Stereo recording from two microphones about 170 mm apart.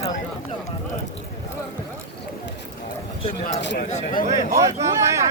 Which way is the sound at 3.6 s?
60° left (ahead or behind).